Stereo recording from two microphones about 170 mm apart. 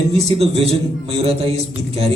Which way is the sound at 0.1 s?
35° right (ahead or behind).